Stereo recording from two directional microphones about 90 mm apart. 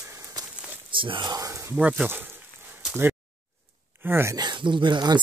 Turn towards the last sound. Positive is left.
turn(degrees=-55)  # may be behind; listen again after turning